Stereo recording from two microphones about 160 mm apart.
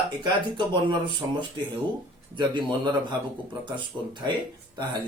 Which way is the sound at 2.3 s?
30° right (ahead or behind).